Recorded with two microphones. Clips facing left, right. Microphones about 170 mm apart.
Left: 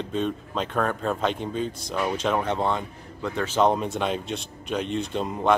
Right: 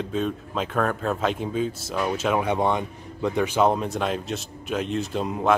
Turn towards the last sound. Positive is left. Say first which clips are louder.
# even
turn(degrees=0)  # may be behind; listen again after turning